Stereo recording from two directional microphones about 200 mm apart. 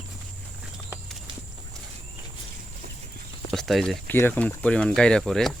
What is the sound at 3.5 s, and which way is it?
Speech, centre (ahead or behind).